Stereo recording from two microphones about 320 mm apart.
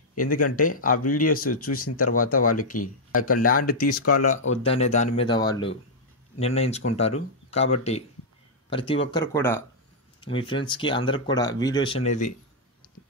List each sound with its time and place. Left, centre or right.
0.2 s speech: left
3.9 s speech: left
4.5 s speech: centre